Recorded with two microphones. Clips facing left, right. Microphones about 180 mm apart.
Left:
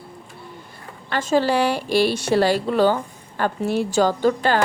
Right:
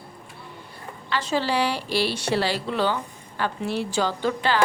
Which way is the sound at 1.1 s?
45° left (ahead or behind).